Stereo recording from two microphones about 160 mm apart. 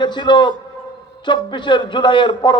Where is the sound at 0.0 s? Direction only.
30° left (ahead or behind).